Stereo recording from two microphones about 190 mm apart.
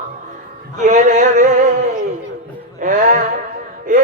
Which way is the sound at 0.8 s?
40° right (ahead or behind).